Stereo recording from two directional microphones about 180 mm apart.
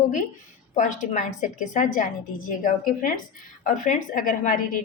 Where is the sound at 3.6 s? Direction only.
50° left (ahead or behind).